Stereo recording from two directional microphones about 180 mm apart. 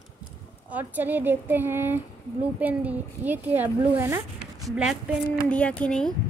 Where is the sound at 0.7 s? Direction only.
10° right (ahead or behind).